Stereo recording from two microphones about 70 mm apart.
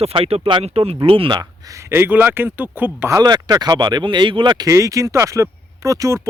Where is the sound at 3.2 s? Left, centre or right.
Right.